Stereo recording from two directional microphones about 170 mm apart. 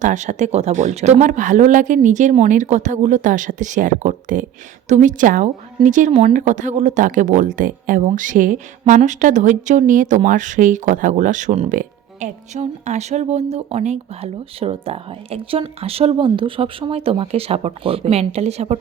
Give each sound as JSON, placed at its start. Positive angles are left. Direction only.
{"t": 0.0, "sound": "speech", "side_deg": -45}